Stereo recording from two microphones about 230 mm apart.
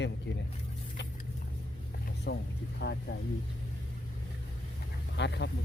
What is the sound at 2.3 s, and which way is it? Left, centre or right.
Speech, left.